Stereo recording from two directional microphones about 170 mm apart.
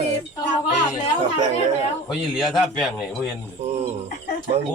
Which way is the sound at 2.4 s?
Centre (ahead or behind).